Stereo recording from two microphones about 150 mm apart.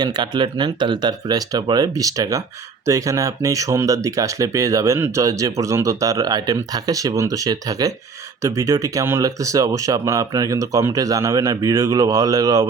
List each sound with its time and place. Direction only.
0.0 s speech: 30° right (ahead or behind)